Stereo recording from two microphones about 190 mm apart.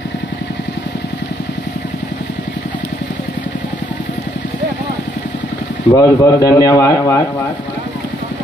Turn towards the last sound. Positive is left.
turn(degrees=15)  # may be behind; listen again after turning